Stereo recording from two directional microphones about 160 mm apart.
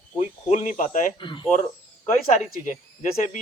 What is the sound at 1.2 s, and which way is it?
Speech, 30° left (ahead or behind).